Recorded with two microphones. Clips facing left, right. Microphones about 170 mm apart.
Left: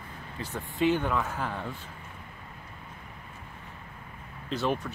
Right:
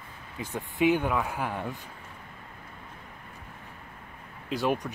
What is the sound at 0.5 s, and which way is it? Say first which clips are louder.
Speech: right 2 dB; 15° right (ahead or behind).